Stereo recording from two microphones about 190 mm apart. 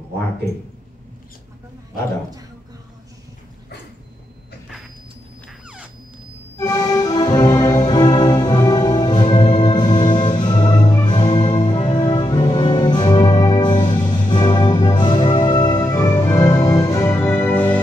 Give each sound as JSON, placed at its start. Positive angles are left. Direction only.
{"t": 6.6, "sound": "music", "side_deg": 20}